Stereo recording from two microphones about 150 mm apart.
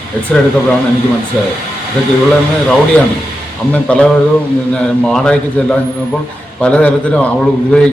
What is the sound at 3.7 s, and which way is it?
A man's voice, 10° left (ahead or behind).